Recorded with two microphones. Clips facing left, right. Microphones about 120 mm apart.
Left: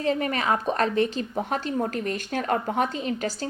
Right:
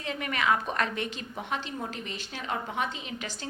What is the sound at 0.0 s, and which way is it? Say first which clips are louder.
A woman's voice: left 6 dB; 35° left (ahead or behind).